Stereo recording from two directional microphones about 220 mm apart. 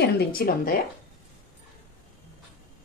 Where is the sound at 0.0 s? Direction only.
45° left (ahead or behind).